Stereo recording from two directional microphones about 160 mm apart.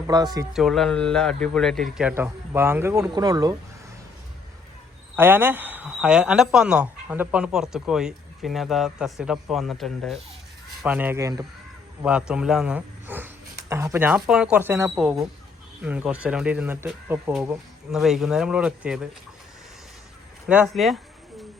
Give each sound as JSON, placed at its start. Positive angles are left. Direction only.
{"t": 0.1, "sound": "speech", "side_deg": -25}
{"t": 0.5, "sound": "speech", "side_deg": 0}
{"t": 2.1, "sound": "speech", "side_deg": -15}
{"t": 5.1, "sound": "speech", "side_deg": -15}
{"t": 10.8, "sound": "speech", "side_deg": -10}
{"t": 12.0, "sound": "a man's voice", "side_deg": -5}
{"t": 14.9, "sound": "speech", "side_deg": -5}
{"t": 18.0, "sound": "speech", "side_deg": 0}
{"t": 20.5, "sound": "speech", "side_deg": -5}